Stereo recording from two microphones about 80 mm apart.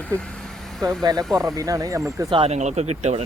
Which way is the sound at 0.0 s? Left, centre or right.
Centre.